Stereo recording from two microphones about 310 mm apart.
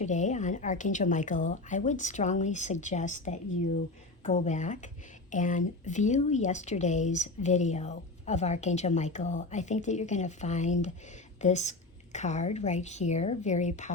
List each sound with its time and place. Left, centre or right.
0.0 s speech: left